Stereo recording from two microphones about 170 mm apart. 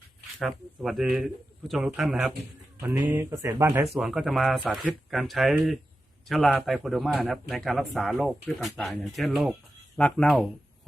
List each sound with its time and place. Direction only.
0.3 s speech: centre (ahead or behind)
3.8 s speech: centre (ahead or behind)